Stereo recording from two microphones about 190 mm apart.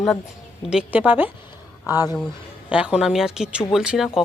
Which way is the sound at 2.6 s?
5° right (ahead or behind).